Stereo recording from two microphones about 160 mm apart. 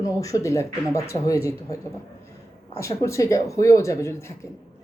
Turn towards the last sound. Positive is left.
turn(degrees=20)  # may be behind; listen again after turning